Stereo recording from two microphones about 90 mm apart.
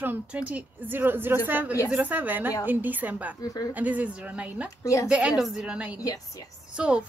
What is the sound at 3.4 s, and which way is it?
Speech, 45° left (ahead or behind).